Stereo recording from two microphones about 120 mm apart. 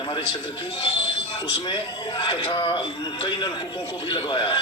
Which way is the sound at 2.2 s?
45° left (ahead or behind).